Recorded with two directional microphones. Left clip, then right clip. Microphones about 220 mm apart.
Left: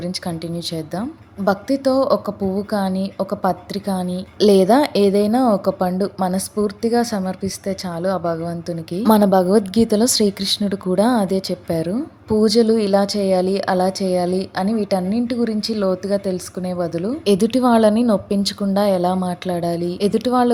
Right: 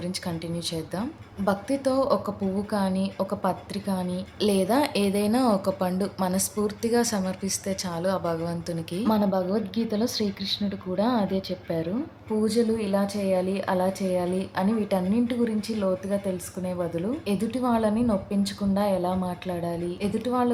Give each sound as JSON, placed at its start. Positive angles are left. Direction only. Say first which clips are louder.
{"t": 0.0, "sound": "a woman's voice", "louder": "left 6 dB", "side_deg": 20}
{"t": 9.1, "sound": "a woman's voice", "louder": "left 12 dB", "side_deg": 40}
{"t": 17.2, "sound": "a woman's voice", "louder": "left 14 dB", "side_deg": 30}